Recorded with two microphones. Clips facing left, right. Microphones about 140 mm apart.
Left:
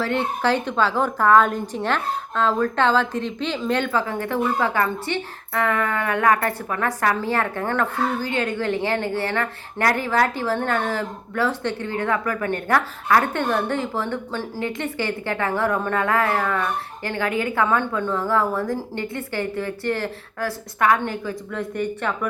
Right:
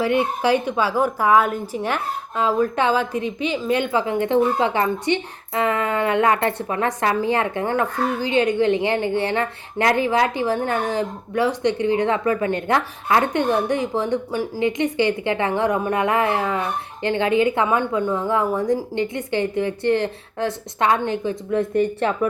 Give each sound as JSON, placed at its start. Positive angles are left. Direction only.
{"t": 0.0, "sound": "a woman's voice", "side_deg": -10}